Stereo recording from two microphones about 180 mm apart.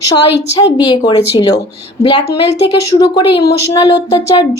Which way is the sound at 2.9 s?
25° left (ahead or behind).